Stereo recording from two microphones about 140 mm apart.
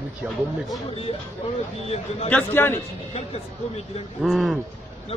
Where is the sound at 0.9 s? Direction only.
40° left (ahead or behind).